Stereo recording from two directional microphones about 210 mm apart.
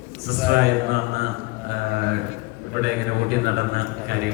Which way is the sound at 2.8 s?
50° right (ahead or behind).